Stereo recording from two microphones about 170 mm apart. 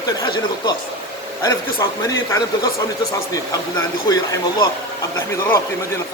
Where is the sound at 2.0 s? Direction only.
20° left (ahead or behind).